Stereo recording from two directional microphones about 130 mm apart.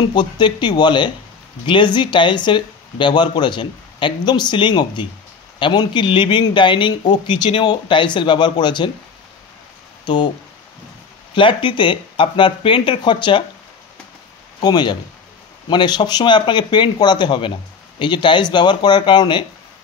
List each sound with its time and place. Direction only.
0.1 s speech: 35° left (ahead or behind)
10.0 s speech: 35° left (ahead or behind)
11.3 s speech: 40° left (ahead or behind)
14.6 s speech: 35° left (ahead or behind)